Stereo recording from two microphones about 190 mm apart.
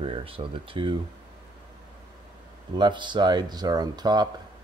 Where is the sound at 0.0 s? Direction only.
30° right (ahead or behind).